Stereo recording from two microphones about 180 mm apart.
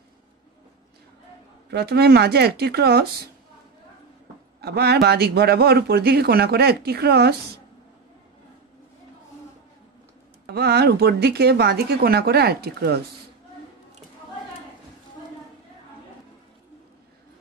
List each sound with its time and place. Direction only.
1.7 s speech: 65° right (ahead or behind)
4.6 s speech: 60° right (ahead or behind)
10.4 s speech: 65° right (ahead or behind)